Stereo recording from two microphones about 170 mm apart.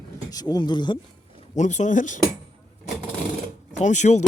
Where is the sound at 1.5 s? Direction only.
45° left (ahead or behind).